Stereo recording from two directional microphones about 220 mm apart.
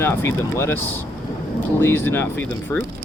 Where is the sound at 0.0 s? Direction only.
10° left (ahead or behind).